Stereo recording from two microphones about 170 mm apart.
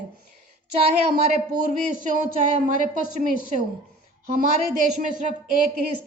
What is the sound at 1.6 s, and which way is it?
A woman's voice, 50° right (ahead or behind).